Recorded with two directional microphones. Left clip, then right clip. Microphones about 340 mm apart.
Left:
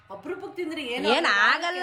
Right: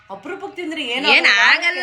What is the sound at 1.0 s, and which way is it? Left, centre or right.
Speech, centre.